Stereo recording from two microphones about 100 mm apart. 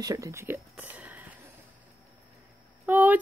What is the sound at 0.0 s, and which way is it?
Speech, 35° right (ahead or behind).